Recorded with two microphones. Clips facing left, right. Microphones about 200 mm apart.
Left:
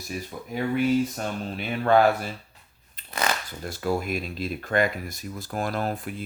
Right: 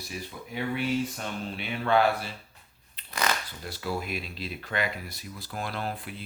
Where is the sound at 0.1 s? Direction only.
45° left (ahead or behind).